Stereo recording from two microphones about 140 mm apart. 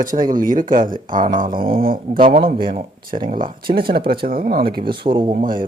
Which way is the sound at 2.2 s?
65° right (ahead or behind).